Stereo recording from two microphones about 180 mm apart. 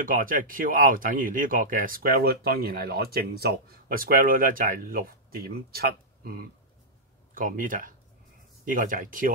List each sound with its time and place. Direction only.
0.0 s speech: 50° right (ahead or behind)
7.3 s speech: 50° right (ahead or behind)